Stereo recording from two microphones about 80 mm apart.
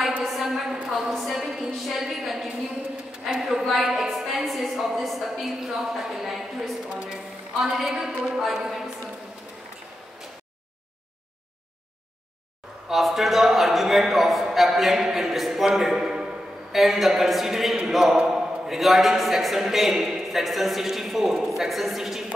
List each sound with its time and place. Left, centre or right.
0.2 s a sound: centre
0.8 s a woman's voice: centre
12.8 s a man's voice: centre